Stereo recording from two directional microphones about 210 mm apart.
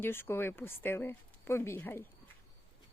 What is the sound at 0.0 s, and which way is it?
Speech, 10° left (ahead or behind).